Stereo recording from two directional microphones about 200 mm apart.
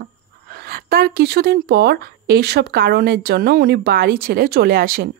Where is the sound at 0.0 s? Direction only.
50° right (ahead or behind).